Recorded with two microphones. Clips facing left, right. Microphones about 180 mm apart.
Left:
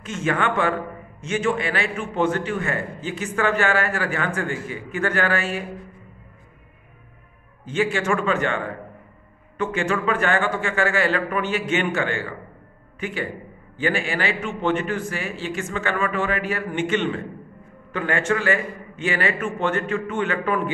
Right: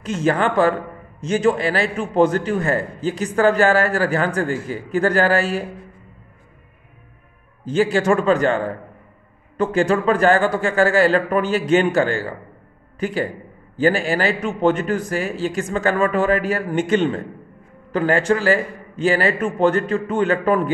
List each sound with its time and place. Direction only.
0.0 s a man's voice: 35° right (ahead or behind)
7.6 s a man's voice: 35° right (ahead or behind)